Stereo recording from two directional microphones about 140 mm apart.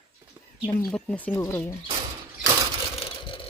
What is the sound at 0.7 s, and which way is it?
Speech, 10° left (ahead or behind).